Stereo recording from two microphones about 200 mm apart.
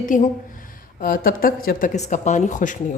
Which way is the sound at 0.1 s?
40° left (ahead or behind).